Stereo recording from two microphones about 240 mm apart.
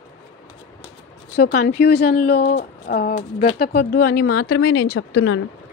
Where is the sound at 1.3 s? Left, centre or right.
Left.